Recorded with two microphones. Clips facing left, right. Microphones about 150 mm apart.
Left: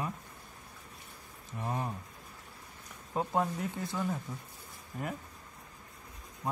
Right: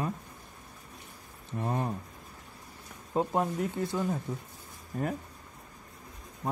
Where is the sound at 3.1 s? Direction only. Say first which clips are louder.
Right 3 dB; 15° right (ahead or behind).